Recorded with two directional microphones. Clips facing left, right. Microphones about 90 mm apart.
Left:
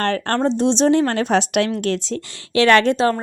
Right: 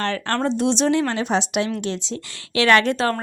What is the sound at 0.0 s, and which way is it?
Speech, 40° left (ahead or behind).